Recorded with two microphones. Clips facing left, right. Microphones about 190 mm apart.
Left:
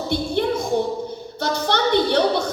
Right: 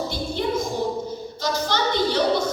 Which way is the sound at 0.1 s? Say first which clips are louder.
Left 4 dB; 60° left (ahead or behind).